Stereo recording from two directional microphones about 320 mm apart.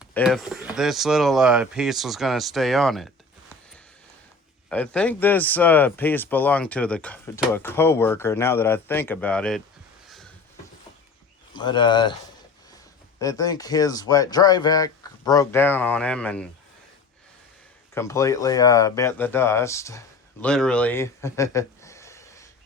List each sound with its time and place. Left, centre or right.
0.0 s speech: centre
4.7 s speech: centre
11.5 s speech: centre
13.1 s speech: centre
17.9 s speech: centre